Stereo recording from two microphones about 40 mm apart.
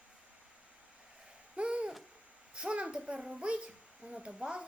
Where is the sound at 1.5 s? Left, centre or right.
Right.